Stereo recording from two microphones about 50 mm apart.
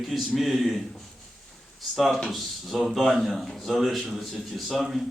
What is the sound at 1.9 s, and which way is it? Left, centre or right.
A man's voice, centre.